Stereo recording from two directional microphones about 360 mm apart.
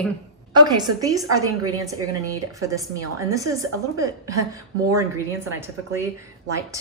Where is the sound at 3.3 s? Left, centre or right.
Centre.